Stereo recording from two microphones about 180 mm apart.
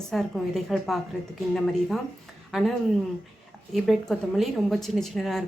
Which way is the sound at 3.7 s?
Centre (ahead or behind).